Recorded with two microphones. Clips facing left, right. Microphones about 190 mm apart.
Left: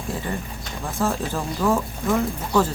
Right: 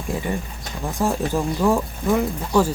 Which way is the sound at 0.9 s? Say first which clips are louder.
Right 3 dB; 15° right (ahead or behind).